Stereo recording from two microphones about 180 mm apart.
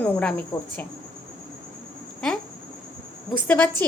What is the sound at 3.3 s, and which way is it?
Speech, 10° left (ahead or behind).